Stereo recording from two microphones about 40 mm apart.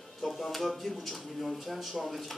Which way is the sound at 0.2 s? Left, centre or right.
Centre.